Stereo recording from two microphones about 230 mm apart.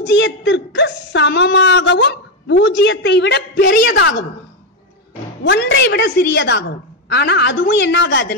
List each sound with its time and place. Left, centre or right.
0.0 s speech: left
5.4 s speech: left